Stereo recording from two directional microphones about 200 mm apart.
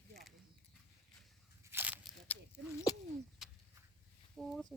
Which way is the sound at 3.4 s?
5° right (ahead or behind).